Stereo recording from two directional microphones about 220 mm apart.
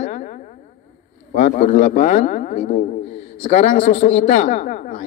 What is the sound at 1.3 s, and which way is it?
A woman's voice, 35° left (ahead or behind).